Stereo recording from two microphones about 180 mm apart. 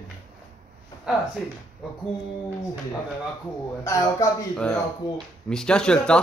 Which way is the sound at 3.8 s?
15° left (ahead or behind).